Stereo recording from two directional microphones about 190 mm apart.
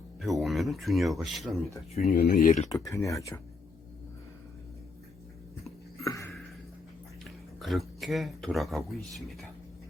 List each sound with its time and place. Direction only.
0.2 s speech: centre (ahead or behind)
2.1 s speech: 50° left (ahead or behind)
2.7 s speech: 15° left (ahead or behind)
6.0 s a sound: 15° left (ahead or behind)
7.3 s speech: centre (ahead or behind)